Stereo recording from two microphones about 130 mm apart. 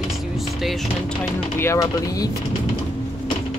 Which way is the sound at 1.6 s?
25° left (ahead or behind).